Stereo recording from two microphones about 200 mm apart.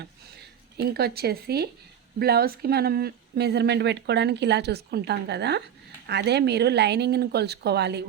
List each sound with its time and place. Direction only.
0.8 s speech: 50° right (ahead or behind)